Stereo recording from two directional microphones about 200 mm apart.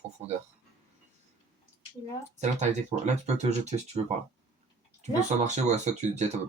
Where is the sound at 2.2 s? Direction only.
35° right (ahead or behind).